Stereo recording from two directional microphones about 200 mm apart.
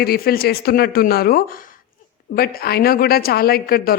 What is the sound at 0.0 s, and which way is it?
A man's voice, 50° left (ahead or behind).